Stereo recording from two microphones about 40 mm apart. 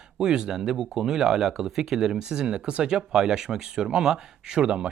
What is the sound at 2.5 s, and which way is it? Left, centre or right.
Speech, right.